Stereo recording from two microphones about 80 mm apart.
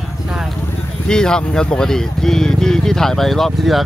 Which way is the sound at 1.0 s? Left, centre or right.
Centre.